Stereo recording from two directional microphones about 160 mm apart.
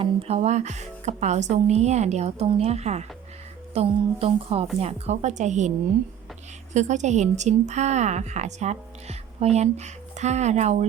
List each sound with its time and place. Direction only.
0.0 s speech: 40° right (ahead or behind)
6.7 s speech: 45° right (ahead or behind)